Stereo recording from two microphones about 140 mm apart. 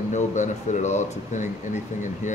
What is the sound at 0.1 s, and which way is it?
Speech, 60° left (ahead or behind).